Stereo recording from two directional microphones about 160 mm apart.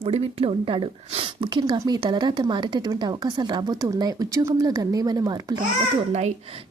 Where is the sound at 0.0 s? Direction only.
40° right (ahead or behind).